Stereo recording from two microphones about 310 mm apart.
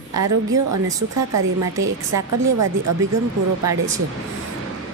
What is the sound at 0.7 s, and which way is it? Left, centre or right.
Speech, right.